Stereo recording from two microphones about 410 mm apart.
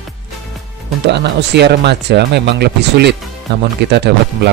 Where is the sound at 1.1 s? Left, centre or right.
Right.